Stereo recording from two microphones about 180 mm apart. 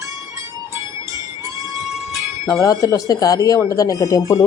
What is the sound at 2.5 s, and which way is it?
Speech, 20° left (ahead or behind).